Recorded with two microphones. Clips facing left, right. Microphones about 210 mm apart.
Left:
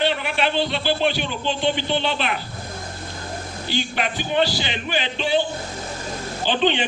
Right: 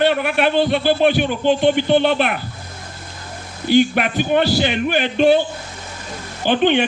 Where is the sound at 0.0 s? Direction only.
55° right (ahead or behind).